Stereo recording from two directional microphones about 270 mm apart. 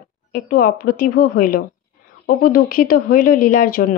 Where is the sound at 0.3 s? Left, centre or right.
Left.